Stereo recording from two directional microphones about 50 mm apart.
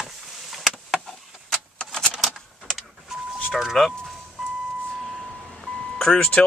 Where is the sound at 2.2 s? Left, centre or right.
Centre.